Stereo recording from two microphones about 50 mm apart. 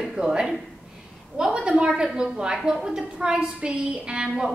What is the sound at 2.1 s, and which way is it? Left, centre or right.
A woman's voice, centre.